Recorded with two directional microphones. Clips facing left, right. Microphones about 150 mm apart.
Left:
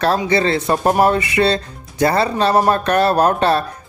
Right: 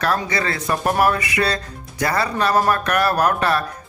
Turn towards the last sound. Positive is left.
turn(degrees=30)  # may be behind; listen again after turning